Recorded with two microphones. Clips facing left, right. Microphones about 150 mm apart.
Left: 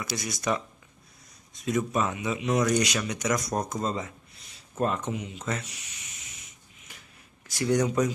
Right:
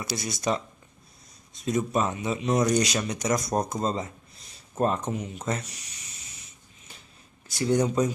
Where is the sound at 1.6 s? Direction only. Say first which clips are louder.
Right 1 dB; 30° right (ahead or behind).